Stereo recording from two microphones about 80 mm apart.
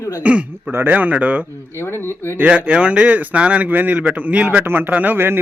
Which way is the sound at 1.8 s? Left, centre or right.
Left.